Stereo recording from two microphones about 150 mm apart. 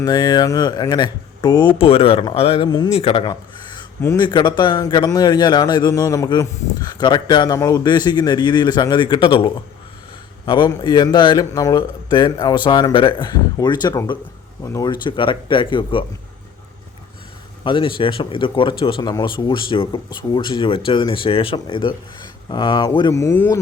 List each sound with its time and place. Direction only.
0.0 s a man's voice: 30° left (ahead or behind)
2.9 s a man's voice: 40° left (ahead or behind)
17.6 s speech: 30° left (ahead or behind)
23.1 s speech: 15° left (ahead or behind)